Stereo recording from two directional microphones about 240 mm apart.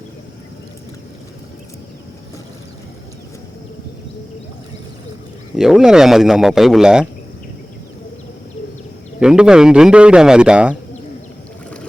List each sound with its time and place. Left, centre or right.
5.5 s speech: centre
9.2 s speech: centre